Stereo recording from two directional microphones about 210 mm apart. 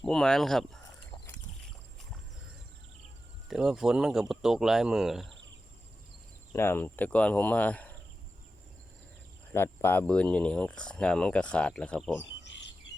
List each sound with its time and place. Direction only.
0.0 s speech: centre (ahead or behind)
3.5 s speech: centre (ahead or behind)
6.5 s speech: 10° left (ahead or behind)
9.5 s speech: 10° left (ahead or behind)
12.4 s chirp: 55° left (ahead or behind)